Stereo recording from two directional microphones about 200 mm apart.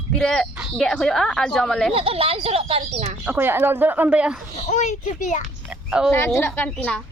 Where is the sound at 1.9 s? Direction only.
30° right (ahead or behind).